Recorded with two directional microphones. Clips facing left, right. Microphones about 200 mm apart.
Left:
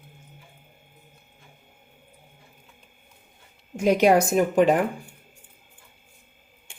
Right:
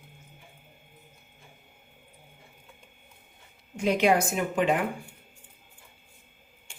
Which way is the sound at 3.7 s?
45° left (ahead or behind).